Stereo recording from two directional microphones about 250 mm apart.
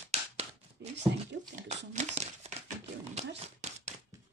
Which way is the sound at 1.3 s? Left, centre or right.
Right.